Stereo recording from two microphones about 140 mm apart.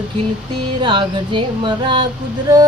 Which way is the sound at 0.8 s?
35° right (ahead or behind).